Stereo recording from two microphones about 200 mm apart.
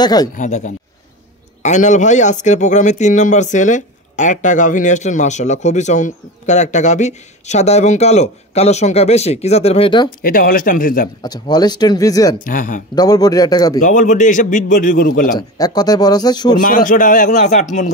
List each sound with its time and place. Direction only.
0.0 s a man's voice: 20° left (ahead or behind)
0.3 s speech: 40° left (ahead or behind)
10.0 s speech: 45° left (ahead or behind)
11.2 s a man's voice: 20° left (ahead or behind)
12.4 s speech: 40° left (ahead or behind)
12.9 s a man's voice: 20° left (ahead or behind)
13.8 s speech: 40° left (ahead or behind)
15.3 s a man's voice: 20° left (ahead or behind)
16.6 s speech: 40° left (ahead or behind)